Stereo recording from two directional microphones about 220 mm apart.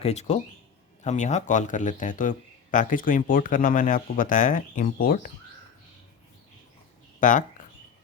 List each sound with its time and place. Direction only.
0.0 s speech: 30° left (ahead or behind)
7.2 s speech: 35° left (ahead or behind)